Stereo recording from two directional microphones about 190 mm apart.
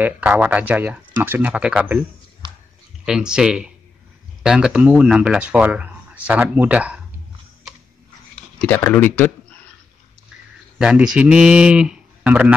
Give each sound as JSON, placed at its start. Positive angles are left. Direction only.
{"t": 0.0, "sound": "speech", "side_deg": -10}
{"t": 2.4, "sound": "a sound", "side_deg": -25}
{"t": 3.1, "sound": "speech", "side_deg": -5}
{"t": 8.5, "sound": "speech", "side_deg": 10}
{"t": 10.8, "sound": "speech", "side_deg": -5}